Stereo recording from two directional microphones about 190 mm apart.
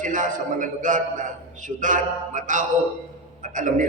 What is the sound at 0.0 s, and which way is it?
A man's voice, 45° right (ahead or behind).